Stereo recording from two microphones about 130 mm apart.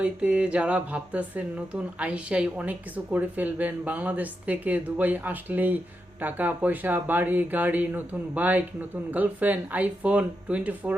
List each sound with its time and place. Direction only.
0.0 s speech: 10° right (ahead or behind)